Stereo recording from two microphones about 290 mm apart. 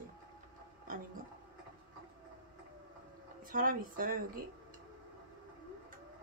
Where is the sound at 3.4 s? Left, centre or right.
Right.